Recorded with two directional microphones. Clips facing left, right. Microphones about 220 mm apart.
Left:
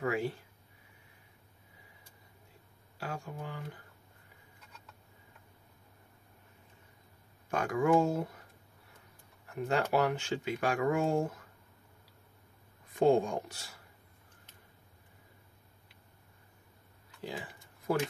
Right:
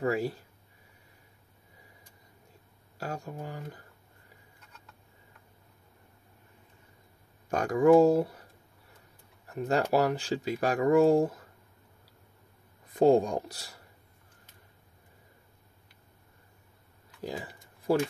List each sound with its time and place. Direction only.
0.0 s a sound: 35° right (ahead or behind)
3.0 s speech: 40° right (ahead or behind)
7.5 s speech: 40° right (ahead or behind)
9.5 s speech: 40° right (ahead or behind)
12.9 s speech: 35° right (ahead or behind)
17.2 s speech: 40° right (ahead or behind)
17.9 s speech: 30° right (ahead or behind)